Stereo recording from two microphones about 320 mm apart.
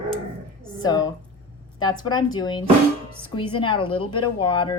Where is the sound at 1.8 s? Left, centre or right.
Centre.